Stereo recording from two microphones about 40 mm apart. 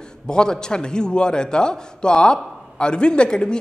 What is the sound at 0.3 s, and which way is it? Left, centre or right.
A man's voice, centre.